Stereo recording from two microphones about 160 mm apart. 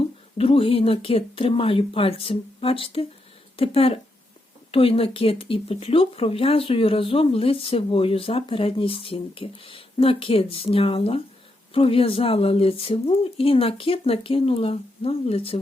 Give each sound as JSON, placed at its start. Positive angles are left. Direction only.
{"t": 0.0, "sound": "speech", "side_deg": 35}